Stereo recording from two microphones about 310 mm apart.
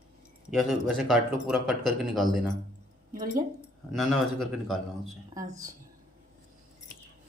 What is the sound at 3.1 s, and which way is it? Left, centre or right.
Speech, right.